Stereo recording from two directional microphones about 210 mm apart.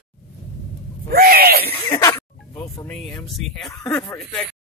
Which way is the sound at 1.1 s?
45° right (ahead or behind).